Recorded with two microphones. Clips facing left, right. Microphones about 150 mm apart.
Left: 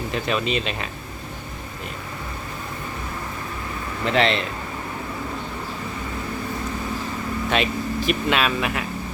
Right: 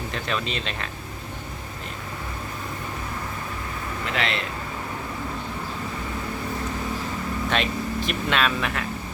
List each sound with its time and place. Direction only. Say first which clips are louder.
0.1 s speech: left 6 dB; 10° left (ahead or behind)
4.0 s speech: left 8 dB; 30° left (ahead or behind)
7.5 s speech: left 3 dB; 5° left (ahead or behind)